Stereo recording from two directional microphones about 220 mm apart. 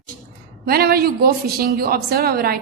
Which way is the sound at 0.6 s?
45° right (ahead or behind).